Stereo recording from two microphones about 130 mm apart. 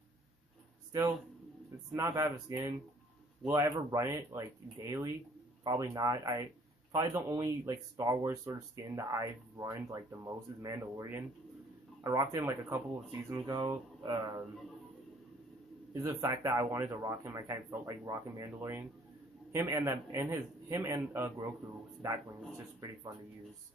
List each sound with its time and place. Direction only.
1.9 s speech: 25° right (ahead or behind)
13.5 s speech: 30° right (ahead or behind)
15.9 s speech: 25° right (ahead or behind)